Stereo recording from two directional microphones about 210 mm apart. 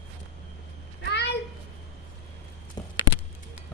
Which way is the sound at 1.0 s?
55° left (ahead or behind).